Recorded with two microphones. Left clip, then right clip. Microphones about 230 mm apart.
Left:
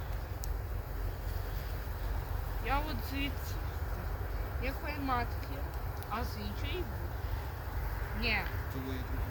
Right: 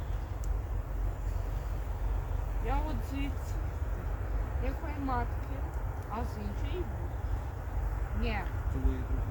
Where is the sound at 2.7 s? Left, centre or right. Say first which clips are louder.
Left 2 dB; centre.